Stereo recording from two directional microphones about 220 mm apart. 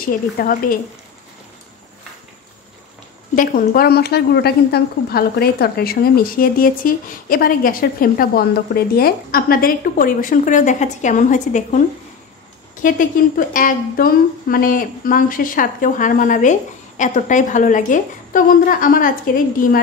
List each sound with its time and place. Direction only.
0.0 s a woman's voice: 40° left (ahead or behind)
3.3 s a woman's voice: 40° left (ahead or behind)
12.8 s a woman's voice: 35° left (ahead or behind)